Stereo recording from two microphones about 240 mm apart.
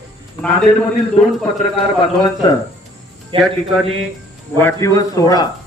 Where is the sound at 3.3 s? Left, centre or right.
Right.